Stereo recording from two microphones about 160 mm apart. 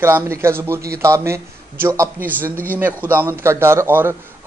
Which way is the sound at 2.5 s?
10° left (ahead or behind).